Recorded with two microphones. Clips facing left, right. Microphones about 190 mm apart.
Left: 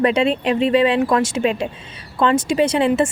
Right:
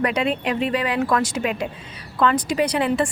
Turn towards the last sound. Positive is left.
turn(degrees=25)  # may be behind; listen again after turning